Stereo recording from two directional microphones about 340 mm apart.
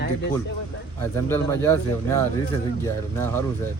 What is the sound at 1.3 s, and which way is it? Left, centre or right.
Speech, centre.